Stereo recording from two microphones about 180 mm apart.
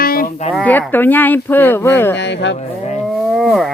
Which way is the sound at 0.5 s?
10° left (ahead or behind).